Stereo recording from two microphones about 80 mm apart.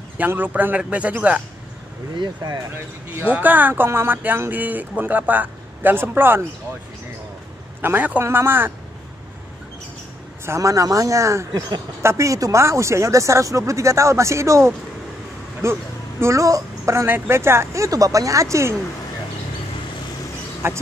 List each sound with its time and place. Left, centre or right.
0.2 s speech: right
2.1 s speech: right
2.7 s speech: right
7.8 s speech: right
10.4 s speech: right
20.6 s speech: right